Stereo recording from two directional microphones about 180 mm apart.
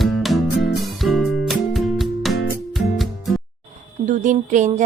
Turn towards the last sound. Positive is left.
turn(degrees=-45)  # may be behind; listen again after turning